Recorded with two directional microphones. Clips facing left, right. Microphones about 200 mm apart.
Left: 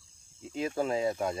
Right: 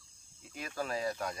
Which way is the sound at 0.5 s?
25° left (ahead or behind).